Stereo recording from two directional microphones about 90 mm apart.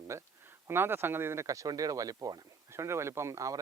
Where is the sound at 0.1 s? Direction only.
30° right (ahead or behind).